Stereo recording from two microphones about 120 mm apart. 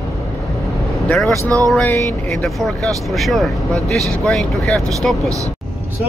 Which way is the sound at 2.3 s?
5° left (ahead or behind).